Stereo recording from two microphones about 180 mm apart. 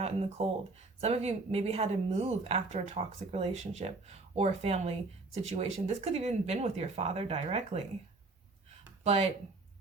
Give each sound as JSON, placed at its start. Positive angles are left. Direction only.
{"t": 0.0, "sound": "speech", "side_deg": -35}
{"t": 9.0, "sound": "speech", "side_deg": -35}